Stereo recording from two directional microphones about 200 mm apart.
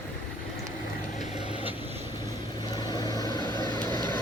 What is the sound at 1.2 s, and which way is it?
Vehicle, 30° left (ahead or behind).